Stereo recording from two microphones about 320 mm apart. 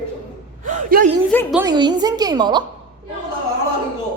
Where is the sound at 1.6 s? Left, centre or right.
Centre.